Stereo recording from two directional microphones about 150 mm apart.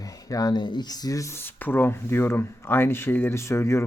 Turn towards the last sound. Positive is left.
turn(degrees=20)  # may be behind; listen again after turning